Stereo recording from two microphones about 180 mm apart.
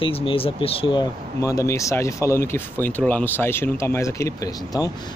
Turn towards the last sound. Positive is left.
turn(degrees=20)  # may be behind; listen again after turning